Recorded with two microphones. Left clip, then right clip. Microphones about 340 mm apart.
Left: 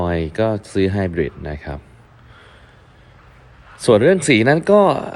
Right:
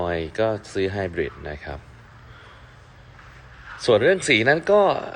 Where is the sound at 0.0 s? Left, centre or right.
Left.